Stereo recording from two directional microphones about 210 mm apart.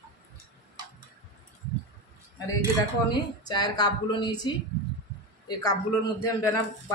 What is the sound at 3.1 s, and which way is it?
A woman's voice, 20° left (ahead or behind).